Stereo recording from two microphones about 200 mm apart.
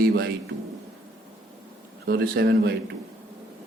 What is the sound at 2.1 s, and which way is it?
Speech, 55° right (ahead or behind).